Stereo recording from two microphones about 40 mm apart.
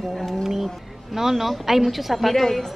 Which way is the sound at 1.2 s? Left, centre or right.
Centre.